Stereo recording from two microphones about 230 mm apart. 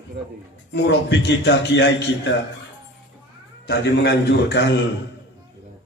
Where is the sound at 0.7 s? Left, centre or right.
Left.